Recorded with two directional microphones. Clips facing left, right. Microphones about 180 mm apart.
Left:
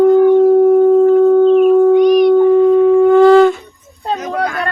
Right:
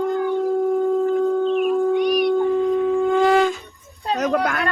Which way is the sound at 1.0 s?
55° left (ahead or behind).